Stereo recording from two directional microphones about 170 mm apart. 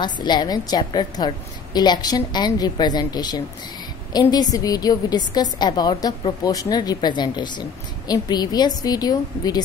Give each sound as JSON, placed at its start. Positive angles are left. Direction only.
{"t": 0.0, "sound": "a woman's voice", "side_deg": 25}